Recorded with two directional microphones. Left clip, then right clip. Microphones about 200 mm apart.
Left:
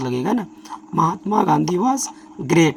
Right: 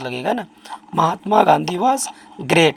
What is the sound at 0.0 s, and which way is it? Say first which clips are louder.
Speech: even; 35° right (ahead or behind).